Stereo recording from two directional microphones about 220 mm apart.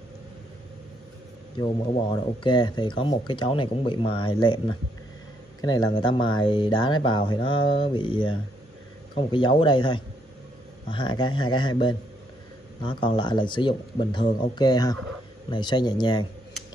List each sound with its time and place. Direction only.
2.4 s speech: 20° left (ahead or behind)